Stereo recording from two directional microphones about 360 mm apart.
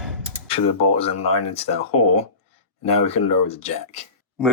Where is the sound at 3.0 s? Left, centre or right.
Centre.